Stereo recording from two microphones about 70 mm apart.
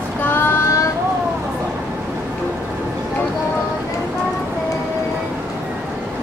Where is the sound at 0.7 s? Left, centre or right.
Left.